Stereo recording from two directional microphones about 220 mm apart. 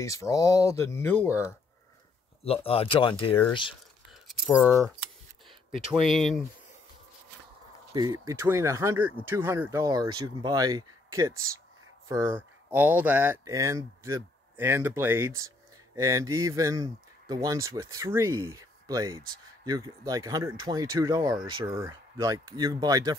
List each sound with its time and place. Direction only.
0.0 s speech: 15° left (ahead or behind)
2.4 s speech: 25° left (ahead or behind)
4.3 s speech: centre (ahead or behind)
7.9 s speech: 15° right (ahead or behind)